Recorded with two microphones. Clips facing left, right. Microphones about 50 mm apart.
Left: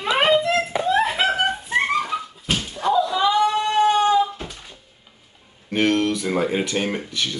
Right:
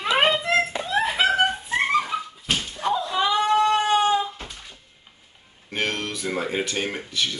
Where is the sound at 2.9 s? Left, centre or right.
Right.